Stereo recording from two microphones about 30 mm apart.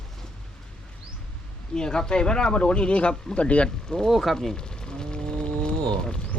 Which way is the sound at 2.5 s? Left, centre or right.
Left.